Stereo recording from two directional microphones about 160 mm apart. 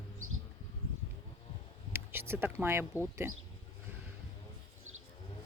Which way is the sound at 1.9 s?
15° right (ahead or behind).